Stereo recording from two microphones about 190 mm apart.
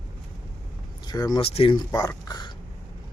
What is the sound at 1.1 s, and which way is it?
Speech, 20° left (ahead or behind).